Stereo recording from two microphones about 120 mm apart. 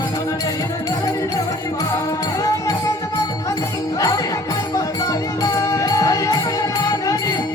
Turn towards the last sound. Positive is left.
turn(degrees=30)  # may be behind; listen again after turning